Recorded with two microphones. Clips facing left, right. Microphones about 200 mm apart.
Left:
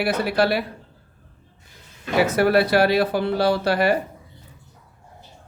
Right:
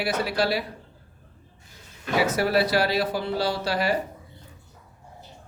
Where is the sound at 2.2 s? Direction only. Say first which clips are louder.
Left 5 dB; 60° left (ahead or behind).